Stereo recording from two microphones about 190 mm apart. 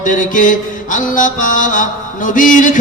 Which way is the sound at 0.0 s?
40° left (ahead or behind).